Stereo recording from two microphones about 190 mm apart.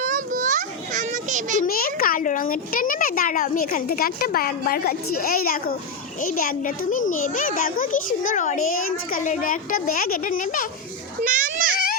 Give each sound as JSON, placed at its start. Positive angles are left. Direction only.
{"t": 0.0, "sound": "children playing", "side_deg": -40}
{"t": 1.6, "sound": "a child's voice", "side_deg": 50}
{"t": 11.2, "sound": "a sound", "side_deg": -45}